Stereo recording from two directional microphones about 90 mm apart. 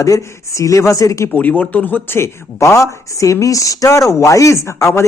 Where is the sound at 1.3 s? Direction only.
20° left (ahead or behind).